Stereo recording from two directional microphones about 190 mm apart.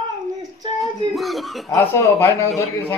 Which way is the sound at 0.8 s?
Centre (ahead or behind).